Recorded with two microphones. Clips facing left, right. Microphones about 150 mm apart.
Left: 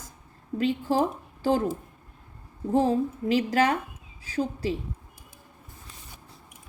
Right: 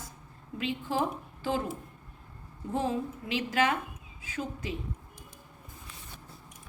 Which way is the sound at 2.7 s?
40° left (ahead or behind).